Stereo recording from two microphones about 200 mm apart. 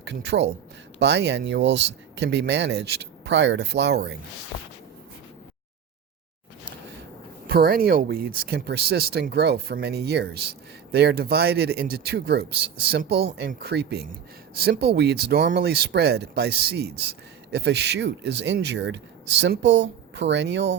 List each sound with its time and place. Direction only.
0.0 s a man's voice: 60° right (ahead or behind)
7.4 s speech: 50° right (ahead or behind)